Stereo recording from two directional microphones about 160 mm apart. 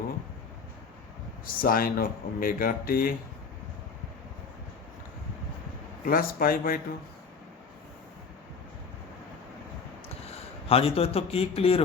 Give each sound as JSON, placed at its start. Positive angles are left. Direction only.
{"t": 1.5, "sound": "speech", "side_deg": 65}
{"t": 6.1, "sound": "speech", "side_deg": 65}
{"t": 10.7, "sound": "a man's voice", "side_deg": 40}